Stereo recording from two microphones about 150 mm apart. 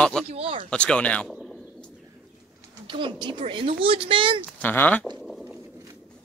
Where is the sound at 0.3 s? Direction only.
40° right (ahead or behind).